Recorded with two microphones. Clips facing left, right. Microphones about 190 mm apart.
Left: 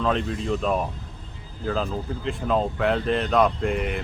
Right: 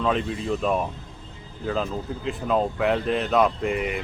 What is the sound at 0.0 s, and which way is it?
Speech, 5° right (ahead or behind).